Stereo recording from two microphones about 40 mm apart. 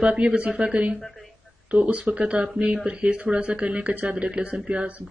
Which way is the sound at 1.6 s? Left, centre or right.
Right.